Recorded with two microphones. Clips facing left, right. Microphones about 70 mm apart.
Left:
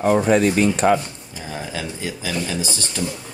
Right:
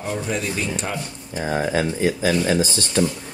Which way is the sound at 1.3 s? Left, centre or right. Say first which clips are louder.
Right 9 dB; right.